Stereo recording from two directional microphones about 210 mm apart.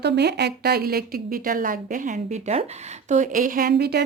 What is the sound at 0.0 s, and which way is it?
A woman's voice, 55° right (ahead or behind).